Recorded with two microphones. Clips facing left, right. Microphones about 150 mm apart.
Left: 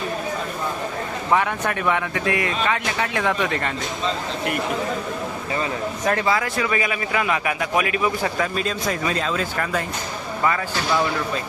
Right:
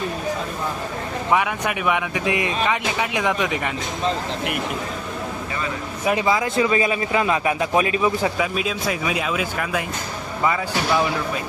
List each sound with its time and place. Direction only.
1.3 s speech: 10° right (ahead or behind)
6.1 s a man's voice: 15° right (ahead or behind)
8.2 s speech: 5° right (ahead or behind)